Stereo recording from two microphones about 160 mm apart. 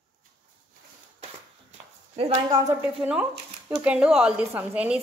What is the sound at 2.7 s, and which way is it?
A woman's voice, 10° right (ahead or behind).